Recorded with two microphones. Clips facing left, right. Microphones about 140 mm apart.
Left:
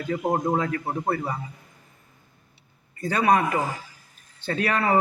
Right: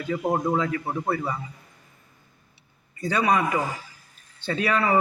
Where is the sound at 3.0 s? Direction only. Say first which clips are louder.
Left 2 dB; 50° left (ahead or behind).